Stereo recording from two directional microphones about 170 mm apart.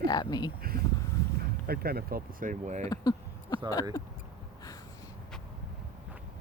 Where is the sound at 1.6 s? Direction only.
65° right (ahead or behind); by 2.9 s 45° right (ahead or behind).